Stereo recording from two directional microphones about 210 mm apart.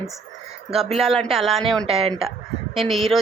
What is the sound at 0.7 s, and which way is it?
Speech, centre (ahead or behind).